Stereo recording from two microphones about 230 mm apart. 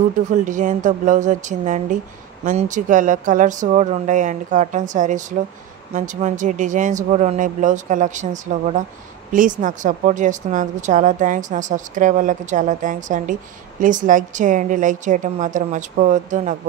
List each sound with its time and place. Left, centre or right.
0.3 s a woman's voice: right